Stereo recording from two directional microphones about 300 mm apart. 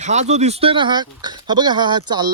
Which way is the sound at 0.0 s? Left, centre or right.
Right.